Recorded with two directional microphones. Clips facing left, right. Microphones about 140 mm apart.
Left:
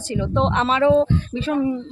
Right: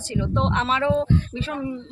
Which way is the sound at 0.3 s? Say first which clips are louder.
Left 5 dB; 30° left (ahead or behind).